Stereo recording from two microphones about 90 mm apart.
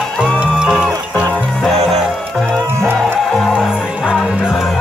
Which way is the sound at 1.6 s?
5° left (ahead or behind).